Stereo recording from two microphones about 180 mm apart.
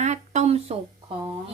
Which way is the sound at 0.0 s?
40° right (ahead or behind).